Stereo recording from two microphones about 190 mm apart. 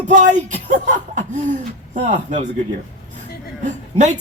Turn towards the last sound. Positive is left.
turn(degrees=-40)  # may be behind; listen again after turning